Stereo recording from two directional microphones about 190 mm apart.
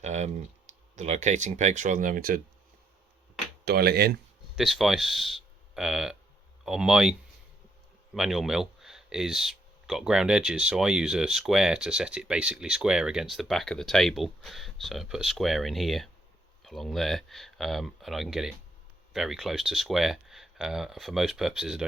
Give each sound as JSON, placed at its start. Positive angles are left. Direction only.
{"t": 0.0, "sound": "speech", "side_deg": -35}
{"t": 3.7, "sound": "speech", "side_deg": -55}
{"t": 4.5, "sound": "speech", "side_deg": 0}